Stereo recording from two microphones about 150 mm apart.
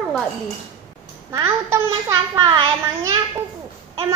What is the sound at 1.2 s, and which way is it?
Speech, 20° right (ahead or behind).